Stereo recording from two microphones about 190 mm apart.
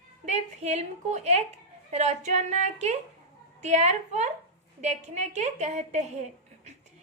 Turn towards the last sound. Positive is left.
turn(degrees=-35)  # may be behind; listen again after turning